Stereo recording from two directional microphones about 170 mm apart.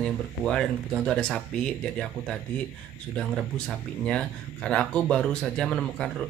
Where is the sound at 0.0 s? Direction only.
5° left (ahead or behind).